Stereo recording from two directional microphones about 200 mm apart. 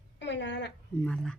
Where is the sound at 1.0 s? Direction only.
5° left (ahead or behind).